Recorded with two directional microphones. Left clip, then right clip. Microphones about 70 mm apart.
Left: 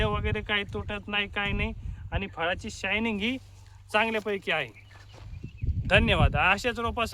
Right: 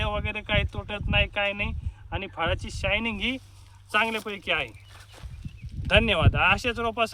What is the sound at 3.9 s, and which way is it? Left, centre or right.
Speech, left.